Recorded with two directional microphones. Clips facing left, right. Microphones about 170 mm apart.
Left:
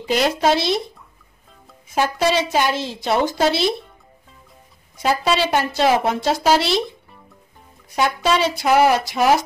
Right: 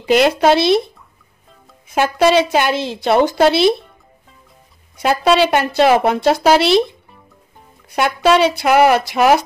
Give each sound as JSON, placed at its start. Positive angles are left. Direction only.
{"t": 0.0, "sound": "a woman's voice", "side_deg": -65}
{"t": 2.0, "sound": "a woman's voice", "side_deg": -65}
{"t": 5.0, "sound": "a woman's voice", "side_deg": -65}
{"t": 7.9, "sound": "a woman's voice", "side_deg": -65}